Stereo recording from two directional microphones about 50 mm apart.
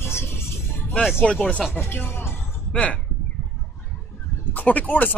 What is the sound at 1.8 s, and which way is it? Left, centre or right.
Speech, left.